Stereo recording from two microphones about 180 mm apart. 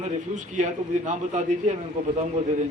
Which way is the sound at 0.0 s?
40° right (ahead or behind).